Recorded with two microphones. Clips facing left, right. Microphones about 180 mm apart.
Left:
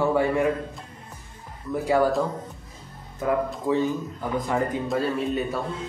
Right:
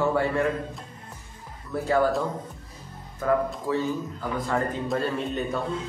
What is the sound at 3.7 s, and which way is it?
Speech, 20° left (ahead or behind).